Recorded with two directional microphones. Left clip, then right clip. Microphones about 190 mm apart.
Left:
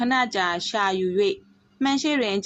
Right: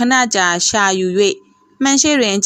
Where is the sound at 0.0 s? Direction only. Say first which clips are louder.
Right 9 dB; 45° right (ahead or behind).